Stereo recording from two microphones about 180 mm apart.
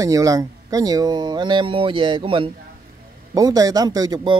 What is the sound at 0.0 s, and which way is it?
A man's voice, 20° right (ahead or behind).